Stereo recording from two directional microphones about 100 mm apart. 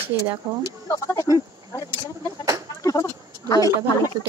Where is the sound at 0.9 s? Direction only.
30° left (ahead or behind).